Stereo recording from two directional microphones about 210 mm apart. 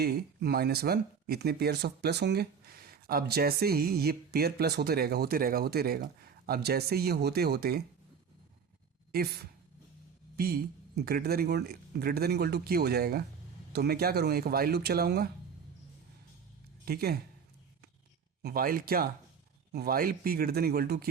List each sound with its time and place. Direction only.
0.0 s speech: 50° right (ahead or behind)
9.1 s speech: 50° right (ahead or behind)
16.8 s speech: 45° right (ahead or behind)
18.4 s speech: 45° right (ahead or behind)